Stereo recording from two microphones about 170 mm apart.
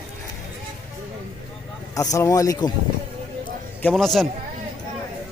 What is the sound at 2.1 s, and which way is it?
Speech, 20° left (ahead or behind).